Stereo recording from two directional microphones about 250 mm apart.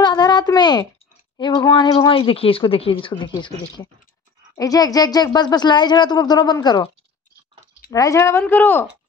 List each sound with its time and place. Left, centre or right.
0.0 s a sound: centre
1.4 s speech: centre
7.9 s speech: centre